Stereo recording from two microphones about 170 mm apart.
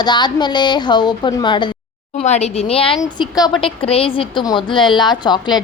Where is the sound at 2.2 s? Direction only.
40° left (ahead or behind).